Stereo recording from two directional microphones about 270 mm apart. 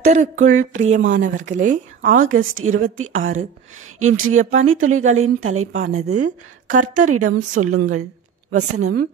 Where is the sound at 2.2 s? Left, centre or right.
Right.